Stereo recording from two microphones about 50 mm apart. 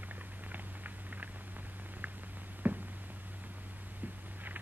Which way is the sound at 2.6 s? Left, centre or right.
Right.